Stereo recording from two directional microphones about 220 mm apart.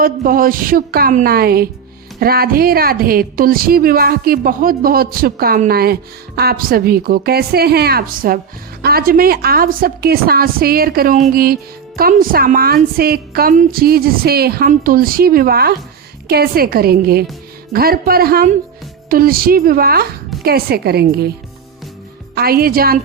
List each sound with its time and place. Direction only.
0.0 s a woman's voice: 40° right (ahead or behind)
22.4 s a woman's voice: 45° right (ahead or behind)